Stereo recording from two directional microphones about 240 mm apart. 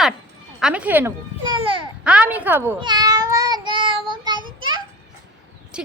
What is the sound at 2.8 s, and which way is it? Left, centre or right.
Meow, centre.